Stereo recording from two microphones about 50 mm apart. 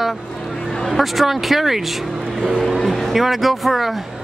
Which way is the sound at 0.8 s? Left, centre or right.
Centre.